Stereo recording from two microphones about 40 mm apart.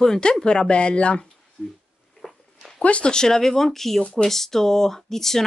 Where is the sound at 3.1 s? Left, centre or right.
Centre.